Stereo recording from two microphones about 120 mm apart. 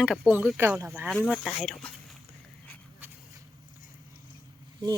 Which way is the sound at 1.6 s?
5° left (ahead or behind).